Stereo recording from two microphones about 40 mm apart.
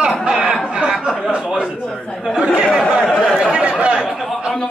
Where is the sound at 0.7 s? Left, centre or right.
Right.